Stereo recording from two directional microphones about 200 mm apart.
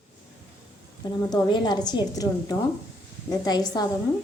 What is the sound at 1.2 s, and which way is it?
A woman's voice, 20° left (ahead or behind).